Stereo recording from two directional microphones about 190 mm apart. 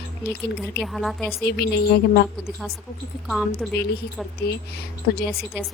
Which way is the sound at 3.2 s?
Centre (ahead or behind).